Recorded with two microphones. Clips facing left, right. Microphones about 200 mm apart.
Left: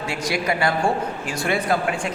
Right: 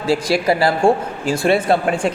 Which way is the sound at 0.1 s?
30° right (ahead or behind).